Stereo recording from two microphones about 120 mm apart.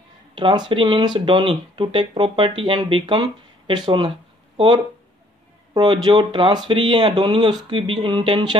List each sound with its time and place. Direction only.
0.3 s speech: 40° right (ahead or behind)